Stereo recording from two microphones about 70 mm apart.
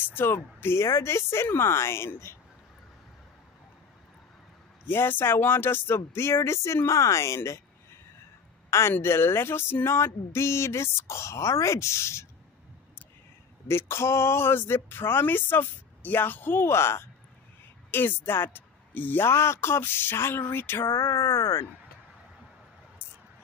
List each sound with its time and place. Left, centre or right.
0.0 s speech: left
4.8 s speech: left
8.6 s a sound: left
9.0 s speech: left
13.7 s speech: left